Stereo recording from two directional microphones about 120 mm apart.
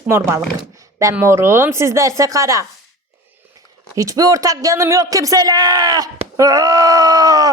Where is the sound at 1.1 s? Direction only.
20° right (ahead or behind).